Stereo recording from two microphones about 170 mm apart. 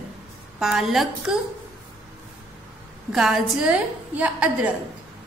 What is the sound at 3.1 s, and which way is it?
A woman's voice, centre (ahead or behind).